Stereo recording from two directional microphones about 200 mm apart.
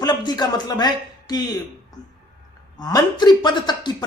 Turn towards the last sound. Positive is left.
turn(degrees=20)  # may be behind; listen again after turning